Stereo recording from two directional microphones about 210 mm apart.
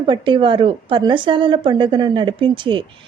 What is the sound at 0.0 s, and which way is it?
Speech, 25° right (ahead or behind).